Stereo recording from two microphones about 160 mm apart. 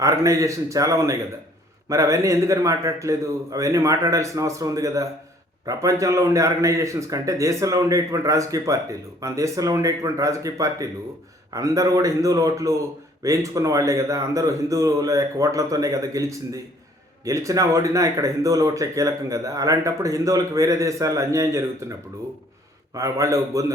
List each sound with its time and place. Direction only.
0.0 s speech: 20° right (ahead or behind)
23.0 s speech: 20° right (ahead or behind)